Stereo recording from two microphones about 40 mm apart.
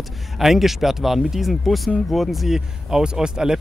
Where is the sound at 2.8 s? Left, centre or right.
Centre.